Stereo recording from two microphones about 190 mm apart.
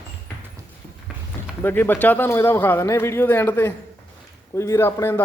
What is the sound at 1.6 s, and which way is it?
Speech, 10° left (ahead or behind).